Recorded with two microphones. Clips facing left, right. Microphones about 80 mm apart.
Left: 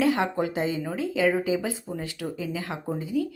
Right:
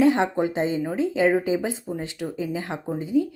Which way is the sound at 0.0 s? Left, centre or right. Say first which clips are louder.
Right 4 dB; right.